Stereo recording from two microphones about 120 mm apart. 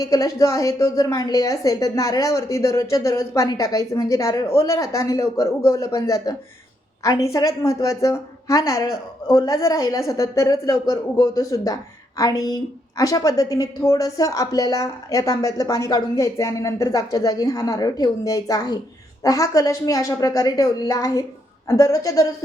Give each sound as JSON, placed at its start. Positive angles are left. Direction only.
{"t": 0.0, "sound": "a woman's voice", "side_deg": 30}